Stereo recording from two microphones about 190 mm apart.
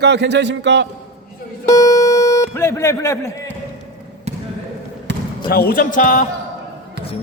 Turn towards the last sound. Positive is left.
turn(degrees=45)  # may be behind; listen again after turning